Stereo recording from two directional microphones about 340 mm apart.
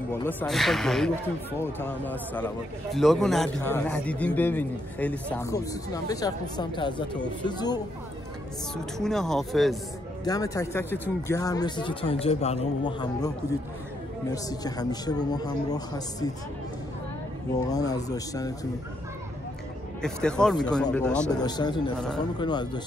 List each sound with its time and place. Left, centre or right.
0.1 s a man's voice: centre
8.9 s a man's voice: centre
14.3 s speech: centre
17.6 s speech: centre
20.0 s a man's voice: centre